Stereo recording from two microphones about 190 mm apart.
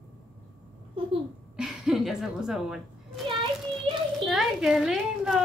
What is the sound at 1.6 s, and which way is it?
A woman's voice, centre (ahead or behind).